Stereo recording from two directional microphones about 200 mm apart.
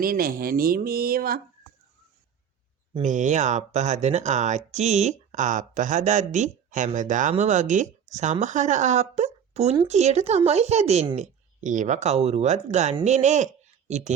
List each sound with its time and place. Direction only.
0.0 s speech: 45° right (ahead or behind)
2.9 s speech: 40° right (ahead or behind)